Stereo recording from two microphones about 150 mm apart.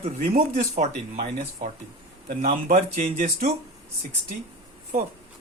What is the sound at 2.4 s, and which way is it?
Speech, 75° right (ahead or behind).